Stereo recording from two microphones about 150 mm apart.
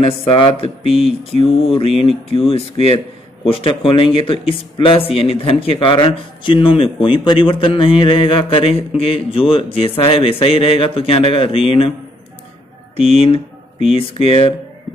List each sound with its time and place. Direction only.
0.0 s speech: 35° left (ahead or behind)
12.9 s speech: 40° left (ahead or behind)